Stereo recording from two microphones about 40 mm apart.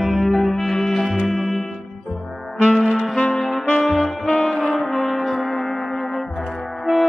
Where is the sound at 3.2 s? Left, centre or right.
Centre.